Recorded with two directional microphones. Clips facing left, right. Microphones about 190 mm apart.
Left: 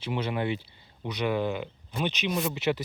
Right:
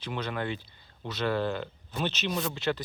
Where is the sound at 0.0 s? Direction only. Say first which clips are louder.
Left 4 dB; 20° left (ahead or behind).